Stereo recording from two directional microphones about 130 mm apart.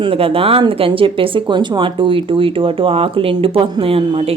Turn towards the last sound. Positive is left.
turn(degrees=-50)  # may be behind; listen again after turning